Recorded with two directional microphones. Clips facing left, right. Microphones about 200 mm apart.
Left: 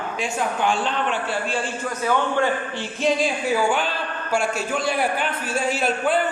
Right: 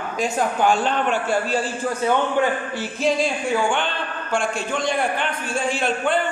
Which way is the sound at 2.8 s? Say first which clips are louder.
Right 1 dB; centre (ahead or behind).